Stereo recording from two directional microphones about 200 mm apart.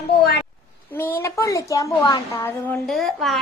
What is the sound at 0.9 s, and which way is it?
A woman's voice, 10° left (ahead or behind).